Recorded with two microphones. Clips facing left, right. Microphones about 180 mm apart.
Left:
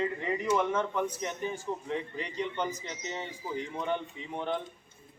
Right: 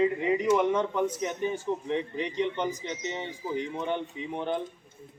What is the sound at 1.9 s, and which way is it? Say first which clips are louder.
A man's voice: right 5 dB; 20° right (ahead or behind).